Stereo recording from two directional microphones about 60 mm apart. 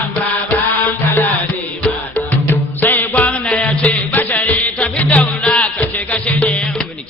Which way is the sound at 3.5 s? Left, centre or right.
Left.